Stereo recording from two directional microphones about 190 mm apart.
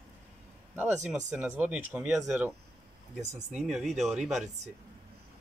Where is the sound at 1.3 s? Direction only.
5° right (ahead or behind).